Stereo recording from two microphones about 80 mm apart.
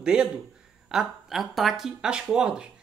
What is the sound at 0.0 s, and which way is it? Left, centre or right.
A man's voice, centre.